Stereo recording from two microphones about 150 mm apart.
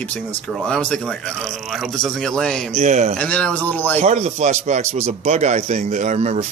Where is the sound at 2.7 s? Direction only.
50° right (ahead or behind).